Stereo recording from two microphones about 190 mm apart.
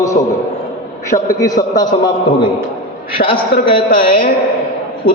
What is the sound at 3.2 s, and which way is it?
A man's voice, 30° left (ahead or behind).